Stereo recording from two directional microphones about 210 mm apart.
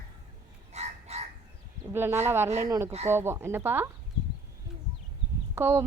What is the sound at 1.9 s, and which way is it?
Speech, 10° right (ahead or behind).